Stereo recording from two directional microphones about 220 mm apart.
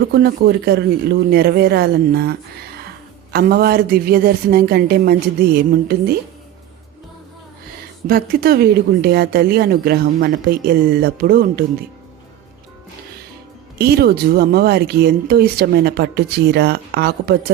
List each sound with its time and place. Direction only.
0.1 s speech: 45° right (ahead or behind)
3.3 s speech: 45° right (ahead or behind)
8.0 s speech: 45° right (ahead or behind)
13.7 s speech: 45° right (ahead or behind)